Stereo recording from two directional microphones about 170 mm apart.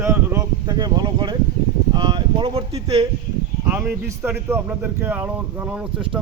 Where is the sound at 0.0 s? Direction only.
15° right (ahead or behind); by 2.8 s 30° right (ahead or behind).